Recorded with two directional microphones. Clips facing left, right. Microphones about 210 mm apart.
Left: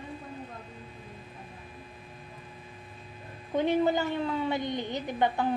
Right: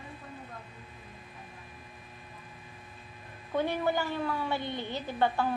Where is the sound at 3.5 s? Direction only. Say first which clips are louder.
Left 4 dB; 20° left (ahead or behind).